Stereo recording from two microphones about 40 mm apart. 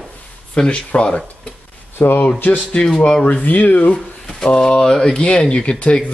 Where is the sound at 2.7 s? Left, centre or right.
Centre.